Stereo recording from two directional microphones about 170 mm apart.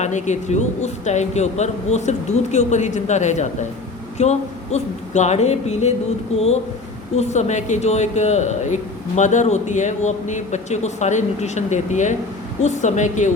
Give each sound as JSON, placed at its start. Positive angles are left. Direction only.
{"t": 0.0, "sound": "a man's voice", "side_deg": 45}